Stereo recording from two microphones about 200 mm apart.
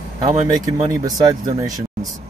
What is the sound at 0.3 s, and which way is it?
Speech, 15° right (ahead or behind).